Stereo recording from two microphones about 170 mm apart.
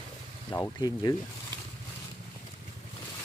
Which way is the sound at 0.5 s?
20° left (ahead or behind).